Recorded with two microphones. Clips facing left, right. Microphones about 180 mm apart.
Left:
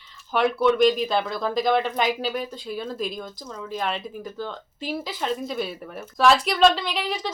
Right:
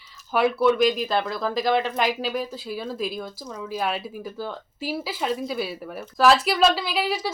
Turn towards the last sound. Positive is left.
turn(degrees=-5)  # may be behind; listen again after turning